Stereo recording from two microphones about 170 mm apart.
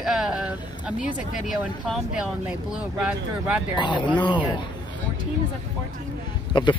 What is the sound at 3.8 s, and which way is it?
Speech, 25° left (ahead or behind).